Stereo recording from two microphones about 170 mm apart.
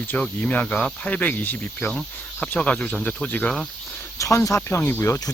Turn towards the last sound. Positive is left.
turn(degrees=15)  # may be behind; listen again after turning